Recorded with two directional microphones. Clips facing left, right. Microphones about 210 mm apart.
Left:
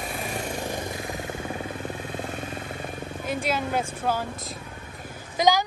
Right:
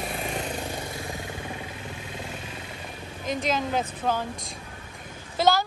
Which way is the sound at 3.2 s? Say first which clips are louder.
Right 1 dB; 10° left (ahead or behind).